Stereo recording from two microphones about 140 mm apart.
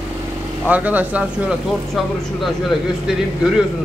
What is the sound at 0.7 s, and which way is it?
Speech, 10° right (ahead or behind).